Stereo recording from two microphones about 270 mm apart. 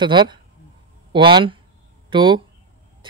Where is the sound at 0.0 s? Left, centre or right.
Centre.